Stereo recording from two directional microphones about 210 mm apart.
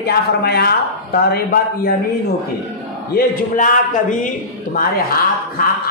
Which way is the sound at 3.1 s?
40° left (ahead or behind).